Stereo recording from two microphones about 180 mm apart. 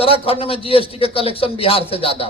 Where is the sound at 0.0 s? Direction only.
30° left (ahead or behind).